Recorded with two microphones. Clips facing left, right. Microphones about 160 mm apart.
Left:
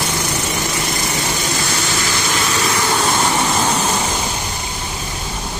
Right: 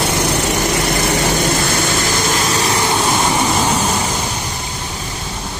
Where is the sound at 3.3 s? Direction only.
10° right (ahead or behind).